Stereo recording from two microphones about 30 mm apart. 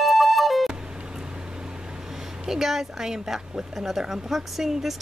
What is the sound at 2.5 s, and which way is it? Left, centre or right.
Speech, centre.